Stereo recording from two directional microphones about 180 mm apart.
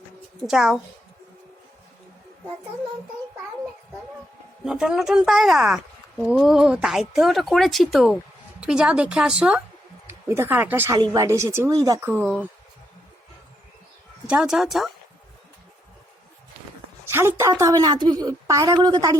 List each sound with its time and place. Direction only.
0.4 s speech: centre (ahead or behind)
4.6 s a woman's voice: 5° right (ahead or behind)
14.3 s speech: 5° right (ahead or behind)
17.1 s a woman's voice: 15° right (ahead or behind)